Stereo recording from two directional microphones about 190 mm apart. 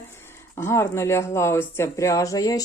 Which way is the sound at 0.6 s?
15° left (ahead or behind).